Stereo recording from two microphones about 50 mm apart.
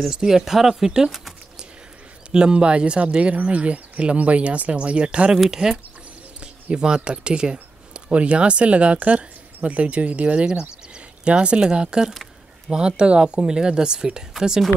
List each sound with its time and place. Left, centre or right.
0.1 s speech: centre
2.3 s speech: centre
5.4 s speech: centre